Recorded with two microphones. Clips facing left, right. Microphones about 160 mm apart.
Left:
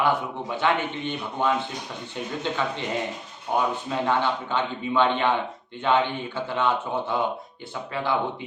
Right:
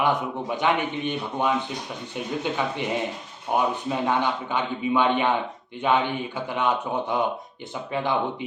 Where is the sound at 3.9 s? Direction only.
15° right (ahead or behind).